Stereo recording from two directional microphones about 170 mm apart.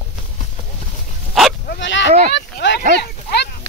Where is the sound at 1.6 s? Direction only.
80° left.